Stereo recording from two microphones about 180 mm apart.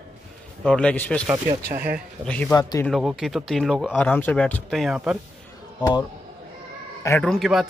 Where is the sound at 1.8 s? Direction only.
10° right (ahead or behind).